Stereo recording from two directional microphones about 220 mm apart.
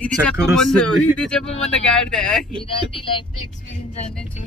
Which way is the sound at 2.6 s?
25° left (ahead or behind).